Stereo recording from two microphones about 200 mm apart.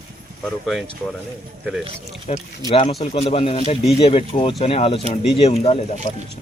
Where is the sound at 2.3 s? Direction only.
30° left (ahead or behind).